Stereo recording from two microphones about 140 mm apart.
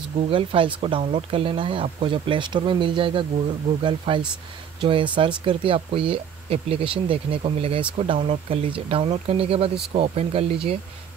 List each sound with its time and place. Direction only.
0.3 s speech: 40° right (ahead or behind)